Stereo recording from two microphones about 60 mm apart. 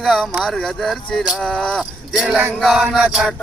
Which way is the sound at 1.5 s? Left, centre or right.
Centre.